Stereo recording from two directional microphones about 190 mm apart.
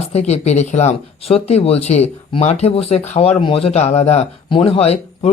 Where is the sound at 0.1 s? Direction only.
35° left (ahead or behind).